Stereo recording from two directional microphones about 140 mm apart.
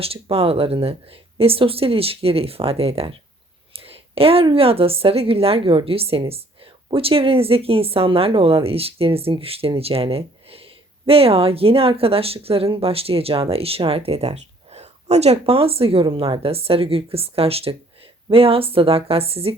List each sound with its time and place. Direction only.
0.0 s speech: 45° right (ahead or behind)